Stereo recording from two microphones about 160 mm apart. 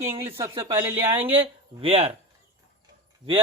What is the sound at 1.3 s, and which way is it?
Speech, 35° right (ahead or behind).